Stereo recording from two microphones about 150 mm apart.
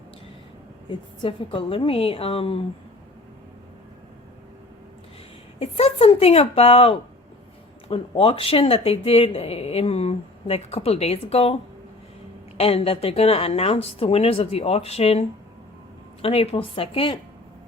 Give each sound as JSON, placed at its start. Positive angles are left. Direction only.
{"t": 0.9, "sound": "speech", "side_deg": 35}
{"t": 5.5, "sound": "speech", "side_deg": 40}
{"t": 12.5, "sound": "speech", "side_deg": 40}
{"t": 16.2, "sound": "speech", "side_deg": 40}